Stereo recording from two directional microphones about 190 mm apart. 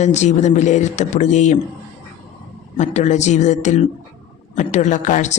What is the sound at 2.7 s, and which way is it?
Speech, 40° left (ahead or behind).